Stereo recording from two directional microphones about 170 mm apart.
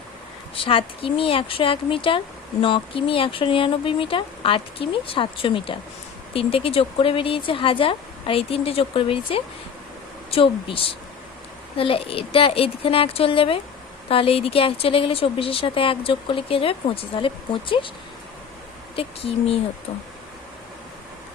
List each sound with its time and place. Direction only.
0.5 s speech: 30° left (ahead or behind)
18.9 s speech: 35° left (ahead or behind)